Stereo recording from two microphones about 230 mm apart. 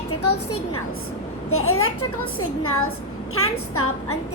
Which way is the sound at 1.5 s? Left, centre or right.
Left.